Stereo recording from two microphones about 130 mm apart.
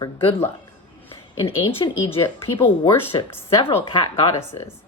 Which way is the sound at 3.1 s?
35° left (ahead or behind).